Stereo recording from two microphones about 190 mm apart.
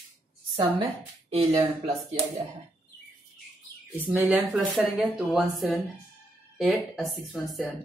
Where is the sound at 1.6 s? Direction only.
35° right (ahead or behind).